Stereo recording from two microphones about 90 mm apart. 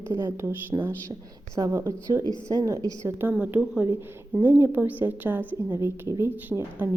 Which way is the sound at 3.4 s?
15° right (ahead or behind).